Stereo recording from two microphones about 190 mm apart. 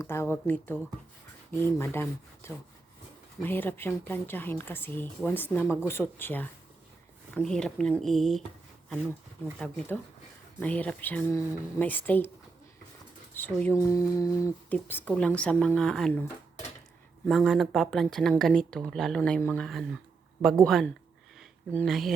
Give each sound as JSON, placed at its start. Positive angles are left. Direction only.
{"t": 0.0, "sound": "speech", "side_deg": 15}
{"t": 9.6, "sound": "speech", "side_deg": 5}
{"t": 13.3, "sound": "speech", "side_deg": 10}
{"t": 17.2, "sound": "speech", "side_deg": 0}
{"t": 21.3, "sound": "a sound", "side_deg": 5}